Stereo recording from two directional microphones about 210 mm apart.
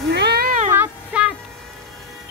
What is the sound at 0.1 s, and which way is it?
Cat, 50° right (ahead or behind).